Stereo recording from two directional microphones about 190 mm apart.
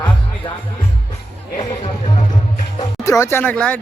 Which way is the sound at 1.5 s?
30° left (ahead or behind).